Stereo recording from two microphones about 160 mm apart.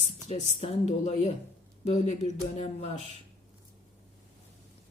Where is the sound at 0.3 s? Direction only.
40° left (ahead or behind).